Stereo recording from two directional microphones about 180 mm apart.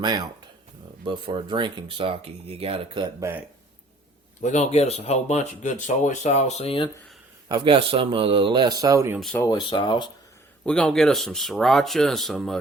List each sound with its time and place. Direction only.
0.0 s speech: 20° right (ahead or behind)
4.4 s speech: 40° left (ahead or behind)
7.4 s speech: 25° right (ahead or behind)
9.3 s speech: 20° left (ahead or behind)
10.7 s speech: 5° left (ahead or behind)